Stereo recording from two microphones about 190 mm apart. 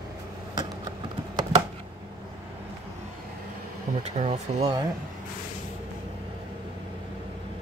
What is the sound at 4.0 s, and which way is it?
Speech, 35° right (ahead or behind).